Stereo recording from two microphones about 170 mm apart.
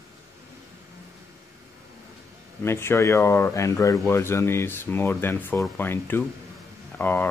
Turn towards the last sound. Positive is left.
turn(degrees=10)  # may be behind; listen again after turning